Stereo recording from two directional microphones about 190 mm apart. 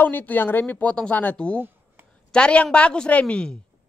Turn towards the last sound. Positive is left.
turn(degrees=5)  # may be behind; listen again after turning